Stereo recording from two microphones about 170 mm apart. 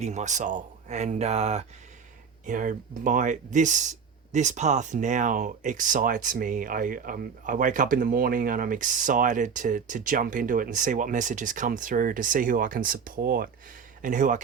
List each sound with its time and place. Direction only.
0.0 s speech: 45° right (ahead or behind)
2.5 s speech: 50° right (ahead or behind)